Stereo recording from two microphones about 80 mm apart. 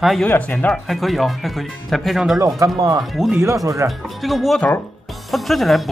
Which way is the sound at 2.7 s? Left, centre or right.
Right.